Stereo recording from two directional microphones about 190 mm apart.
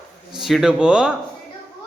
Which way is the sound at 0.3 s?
Centre (ahead or behind).